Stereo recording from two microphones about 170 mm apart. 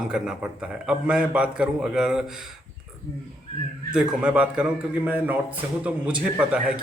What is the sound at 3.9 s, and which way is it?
A man's voice, 5° right (ahead or behind).